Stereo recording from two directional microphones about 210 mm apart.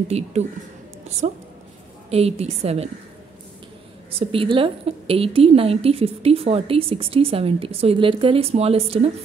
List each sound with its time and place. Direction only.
0.1 s speech: 30° right (ahead or behind)
2.0 s a woman's voice: 30° right (ahead or behind)
4.1 s a woman's voice: 25° right (ahead or behind)